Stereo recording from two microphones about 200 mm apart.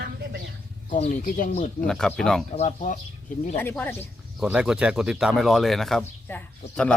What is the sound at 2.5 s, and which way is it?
Speech, 35° left (ahead or behind).